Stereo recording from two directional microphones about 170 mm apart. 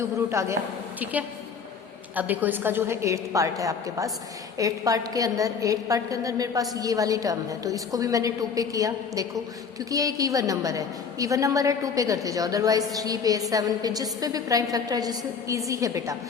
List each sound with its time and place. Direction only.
0.0 s a woman's voice: 15° right (ahead or behind)